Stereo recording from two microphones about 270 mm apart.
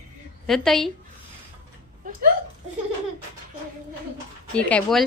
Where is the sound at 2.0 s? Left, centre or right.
Right.